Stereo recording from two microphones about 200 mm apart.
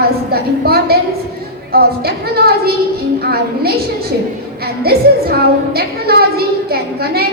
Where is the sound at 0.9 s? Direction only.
50° right (ahead or behind).